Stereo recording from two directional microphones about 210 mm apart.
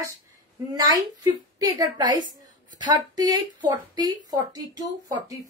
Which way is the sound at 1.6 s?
20° right (ahead or behind).